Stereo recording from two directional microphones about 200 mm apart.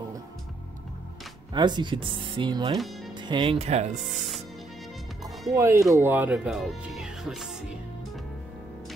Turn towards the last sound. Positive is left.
turn(degrees=0)  # may be behind; listen again after turning